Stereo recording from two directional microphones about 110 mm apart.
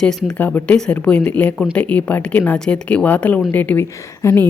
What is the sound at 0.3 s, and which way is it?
A woman's voice, 15° left (ahead or behind).